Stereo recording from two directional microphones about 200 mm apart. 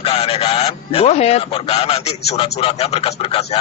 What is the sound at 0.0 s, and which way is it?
Speech, 30° left (ahead or behind).